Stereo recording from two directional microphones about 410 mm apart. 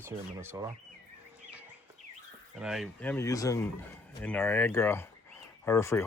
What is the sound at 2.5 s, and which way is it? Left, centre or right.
Speech, centre.